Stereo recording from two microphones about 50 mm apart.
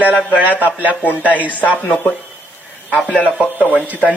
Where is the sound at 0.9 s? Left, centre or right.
Left.